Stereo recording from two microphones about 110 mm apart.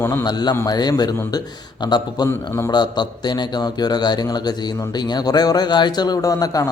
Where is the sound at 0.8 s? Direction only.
40° left (ahead or behind).